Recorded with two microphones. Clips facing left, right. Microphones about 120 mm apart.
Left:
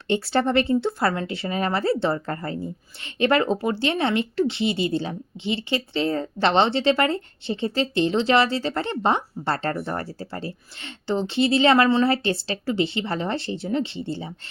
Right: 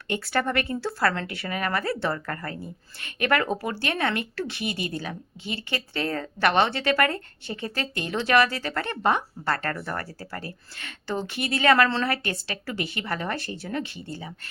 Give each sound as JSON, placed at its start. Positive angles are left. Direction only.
{"t": 0.1, "sound": "speech", "side_deg": 25}